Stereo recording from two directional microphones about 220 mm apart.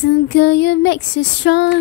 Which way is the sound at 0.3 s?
50° left (ahead or behind).